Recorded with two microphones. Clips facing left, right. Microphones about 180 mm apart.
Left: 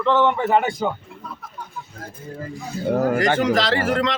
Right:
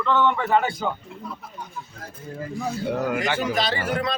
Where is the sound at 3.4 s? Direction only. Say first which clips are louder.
Left 5 dB; 90° left.